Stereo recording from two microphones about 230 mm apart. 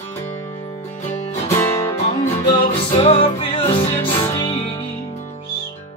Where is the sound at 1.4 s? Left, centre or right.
Centre.